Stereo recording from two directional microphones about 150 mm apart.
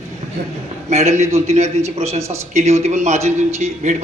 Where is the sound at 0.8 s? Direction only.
45° right (ahead or behind).